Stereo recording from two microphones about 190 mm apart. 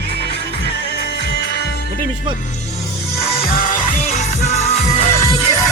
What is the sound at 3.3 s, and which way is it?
Music, 50° left (ahead or behind).